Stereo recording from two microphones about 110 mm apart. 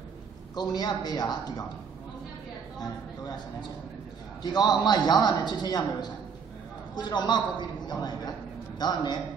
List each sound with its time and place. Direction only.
0.6 s a man's voice: 40° left (ahead or behind)
4.4 s a man's voice: 40° left (ahead or behind)